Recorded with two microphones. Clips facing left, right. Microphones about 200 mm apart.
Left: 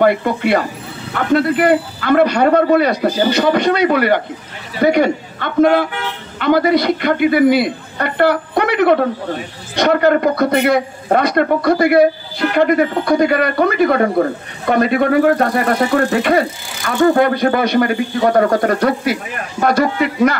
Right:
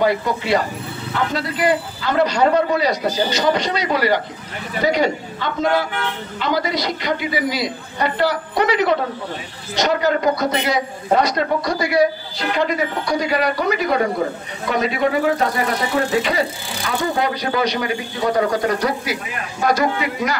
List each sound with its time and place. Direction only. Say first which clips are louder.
0.0 s speech: left 5 dB; 60° left (ahead or behind)